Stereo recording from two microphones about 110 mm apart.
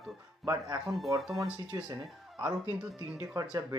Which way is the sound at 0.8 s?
Centre (ahead or behind).